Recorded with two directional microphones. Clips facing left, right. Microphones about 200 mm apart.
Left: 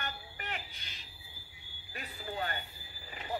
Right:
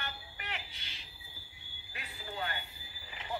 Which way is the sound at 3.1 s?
45° left (ahead or behind).